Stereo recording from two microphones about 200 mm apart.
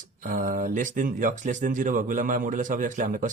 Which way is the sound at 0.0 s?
40° right (ahead or behind).